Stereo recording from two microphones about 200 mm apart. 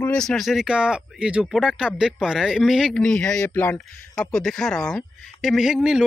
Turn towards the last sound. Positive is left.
turn(degrees=-5)  # may be behind; listen again after turning